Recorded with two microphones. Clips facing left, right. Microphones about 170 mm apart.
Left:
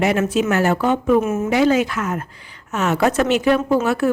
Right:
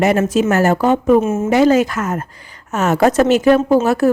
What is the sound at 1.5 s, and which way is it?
A woman's voice, 45° right (ahead or behind).